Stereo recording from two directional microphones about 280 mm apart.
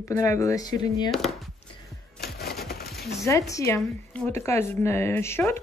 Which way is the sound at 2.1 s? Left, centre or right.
Left.